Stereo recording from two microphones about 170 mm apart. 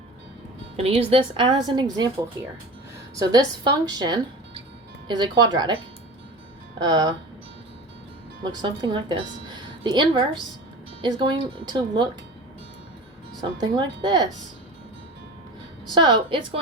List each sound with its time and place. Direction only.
0.8 s a woman's voice: 35° right (ahead or behind)
3.2 s a woman's voice: 25° right (ahead or behind)
8.4 s a woman's voice: 25° right (ahead or behind)
13.6 s a woman's voice: 25° right (ahead or behind)
15.9 s a woman's voice: 25° right (ahead or behind)